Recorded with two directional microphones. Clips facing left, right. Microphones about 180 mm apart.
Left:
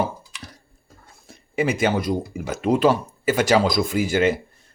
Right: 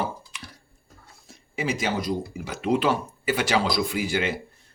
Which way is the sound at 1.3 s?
55° left (ahead or behind).